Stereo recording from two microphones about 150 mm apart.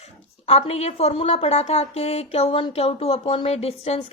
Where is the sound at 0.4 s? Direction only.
40° left (ahead or behind).